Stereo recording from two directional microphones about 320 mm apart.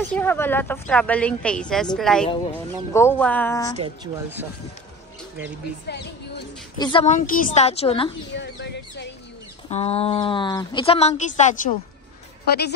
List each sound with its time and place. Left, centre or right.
0.1 s a woman's voice: centre
2.2 s speech: centre
3.7 s speech: centre
5.9 s speech: left
6.8 s speech: centre
8.4 s speech: left
9.7 s speech: centre